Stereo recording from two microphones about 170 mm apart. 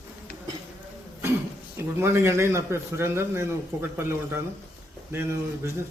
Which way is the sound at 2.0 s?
15° right (ahead or behind).